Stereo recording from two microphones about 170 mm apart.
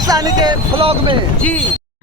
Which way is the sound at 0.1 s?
25° right (ahead or behind).